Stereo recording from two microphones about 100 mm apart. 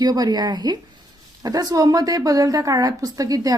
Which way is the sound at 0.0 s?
40° right (ahead or behind).